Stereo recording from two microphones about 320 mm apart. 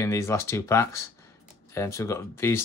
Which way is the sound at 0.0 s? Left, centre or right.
Centre.